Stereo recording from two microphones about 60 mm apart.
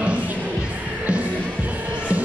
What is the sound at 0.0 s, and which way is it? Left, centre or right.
Music, right.